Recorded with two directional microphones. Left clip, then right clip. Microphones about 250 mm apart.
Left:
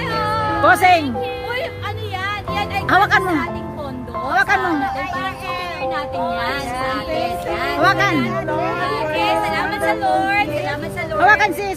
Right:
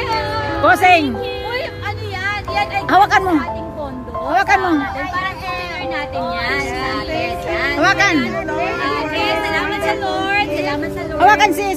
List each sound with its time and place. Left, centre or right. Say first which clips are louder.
0.6 s speech: right 2 dB; centre
2.9 s speech: right 2 dB; centre
6.4 s speech: right 2 dB; left
7.8 s speech: right 2 dB; centre
8.2 s speech: right 1 dB; left
11.1 s speech: right 2 dB; centre